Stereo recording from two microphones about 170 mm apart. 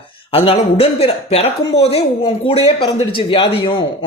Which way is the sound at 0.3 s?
35° left (ahead or behind).